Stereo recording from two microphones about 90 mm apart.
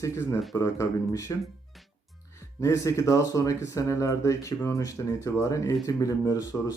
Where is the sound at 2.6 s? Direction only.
35° left (ahead or behind).